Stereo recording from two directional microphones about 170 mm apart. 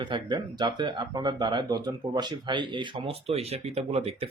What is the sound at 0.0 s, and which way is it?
Speech, 25° right (ahead or behind).